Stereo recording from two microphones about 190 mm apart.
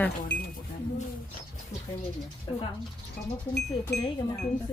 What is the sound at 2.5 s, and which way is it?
Speech, 25° left (ahead or behind).